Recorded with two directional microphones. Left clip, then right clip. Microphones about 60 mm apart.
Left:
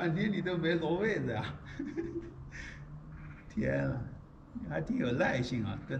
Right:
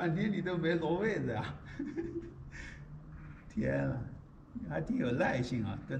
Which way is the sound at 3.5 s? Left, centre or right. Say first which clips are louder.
Left 1 dB; centre.